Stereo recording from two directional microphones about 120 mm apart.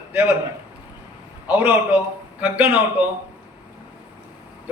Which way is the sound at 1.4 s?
15° right (ahead or behind).